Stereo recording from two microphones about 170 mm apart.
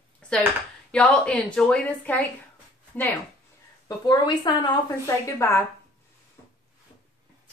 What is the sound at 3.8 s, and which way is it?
A woman's voice, 25° left (ahead or behind).